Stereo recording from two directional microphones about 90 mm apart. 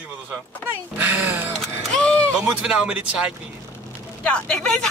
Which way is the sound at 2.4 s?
10° right (ahead or behind).